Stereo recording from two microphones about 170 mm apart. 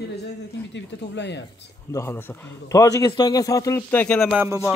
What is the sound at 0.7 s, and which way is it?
Speech, 90° left.